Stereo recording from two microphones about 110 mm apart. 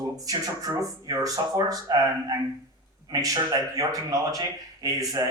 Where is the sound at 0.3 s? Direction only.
35° right (ahead or behind).